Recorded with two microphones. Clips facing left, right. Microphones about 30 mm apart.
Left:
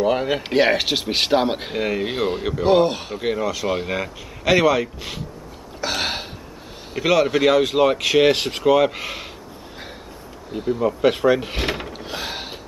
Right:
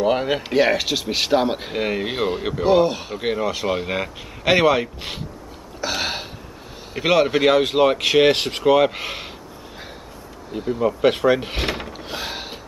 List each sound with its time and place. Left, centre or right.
0.0 s speech: centre
0.4 s speech: centre
1.8 s speech: centre
3.2 s speech: centre
5.8 s speech: centre
7.0 s speech: centre
10.5 s speech: centre